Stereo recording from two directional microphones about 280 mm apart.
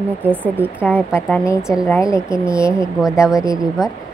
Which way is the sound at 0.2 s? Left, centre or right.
Centre.